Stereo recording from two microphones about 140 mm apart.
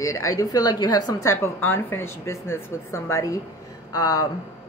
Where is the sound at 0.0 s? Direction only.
20° left (ahead or behind).